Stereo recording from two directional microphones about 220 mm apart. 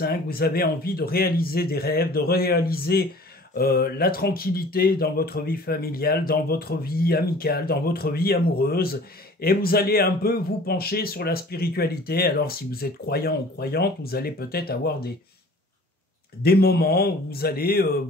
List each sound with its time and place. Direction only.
0.0 s speech: 45° left (ahead or behind)
16.4 s speech: 45° left (ahead or behind)